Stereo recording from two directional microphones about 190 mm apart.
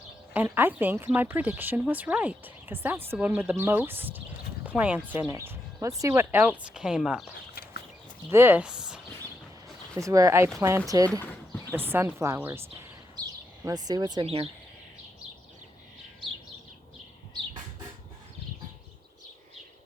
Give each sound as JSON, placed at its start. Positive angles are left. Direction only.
{"t": 0.3, "sound": "speech", "side_deg": -10}
{"t": 7.5, "sound": "a sound", "side_deg": 55}
{"t": 8.3, "sound": "speech", "side_deg": -10}
{"t": 9.9, "sound": "speech", "side_deg": -15}
{"t": 13.7, "sound": "speech", "side_deg": -20}